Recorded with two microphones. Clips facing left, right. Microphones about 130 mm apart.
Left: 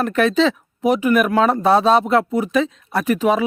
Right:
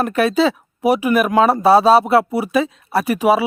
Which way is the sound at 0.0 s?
10° right (ahead or behind).